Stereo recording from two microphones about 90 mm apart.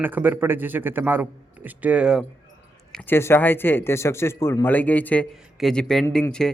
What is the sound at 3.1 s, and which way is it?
A man's voice, 25° left (ahead or behind).